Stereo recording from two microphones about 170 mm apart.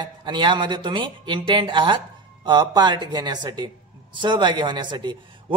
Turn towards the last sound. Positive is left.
turn(degrees=-25)  # may be behind; listen again after turning